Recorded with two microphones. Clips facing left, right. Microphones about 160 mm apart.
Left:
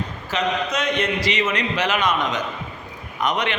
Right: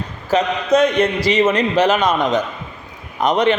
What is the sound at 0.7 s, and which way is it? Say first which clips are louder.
A man's voice: right 9 dB; 30° right (ahead or behind).